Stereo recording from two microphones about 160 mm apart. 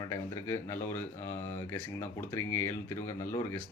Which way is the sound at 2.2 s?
15° left (ahead or behind).